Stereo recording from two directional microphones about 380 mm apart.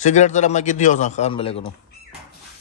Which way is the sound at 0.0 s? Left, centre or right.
Centre.